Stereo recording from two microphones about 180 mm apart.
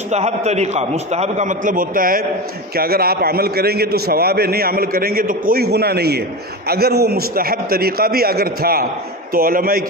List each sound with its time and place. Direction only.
0.1 s a man's voice: 40° right (ahead or behind); by 9.8 s 55° right (ahead or behind)